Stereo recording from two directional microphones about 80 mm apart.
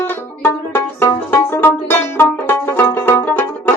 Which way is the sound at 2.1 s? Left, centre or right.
Left.